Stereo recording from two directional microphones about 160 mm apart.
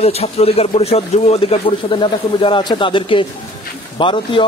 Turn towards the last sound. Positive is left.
turn(degrees=30)  # may be behind; listen again after turning